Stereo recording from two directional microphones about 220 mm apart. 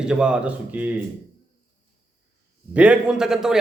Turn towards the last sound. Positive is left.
turn(degrees=0)  # may be behind; listen again after turning